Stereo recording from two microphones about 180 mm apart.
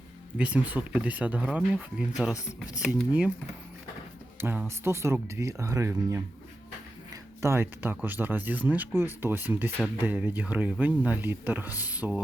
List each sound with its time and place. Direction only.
0.3 s speech: 10° right (ahead or behind)
2.3 s speech: 20° left (ahead or behind)
2.8 s speech: 5° right (ahead or behind)
4.4 s speech: 10° right (ahead or behind)